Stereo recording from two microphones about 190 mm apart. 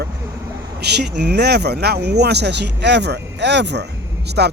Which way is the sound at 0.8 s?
60° right (ahead or behind).